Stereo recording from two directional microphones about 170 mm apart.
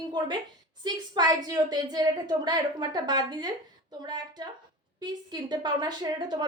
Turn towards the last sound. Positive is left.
turn(degrees=-25)  # may be behind; listen again after turning